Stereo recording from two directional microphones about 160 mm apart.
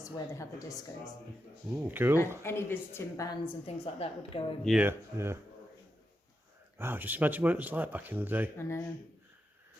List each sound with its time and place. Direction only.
0.0 s a woman's voice: 20° left (ahead or behind)
1.7 s speech: 10° right (ahead or behind)
2.4 s a woman's voice: 15° left (ahead or behind)
3.7 s a woman's voice: 40° left (ahead or behind)
4.8 s speech: 15° right (ahead or behind)
6.7 s speech: 15° right (ahead or behind)
8.5 s a woman's voice: 15° left (ahead or behind)